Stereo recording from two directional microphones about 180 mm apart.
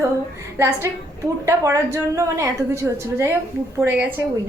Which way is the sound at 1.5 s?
15° right (ahead or behind).